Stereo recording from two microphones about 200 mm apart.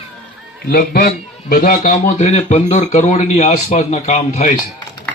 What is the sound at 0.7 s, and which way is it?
A man's voice, 45° left (ahead or behind).